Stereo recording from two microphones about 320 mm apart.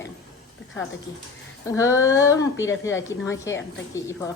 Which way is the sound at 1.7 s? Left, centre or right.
Centre.